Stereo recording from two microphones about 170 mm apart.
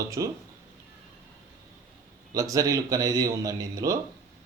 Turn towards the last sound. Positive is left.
turn(degrees=-20)  # may be behind; listen again after turning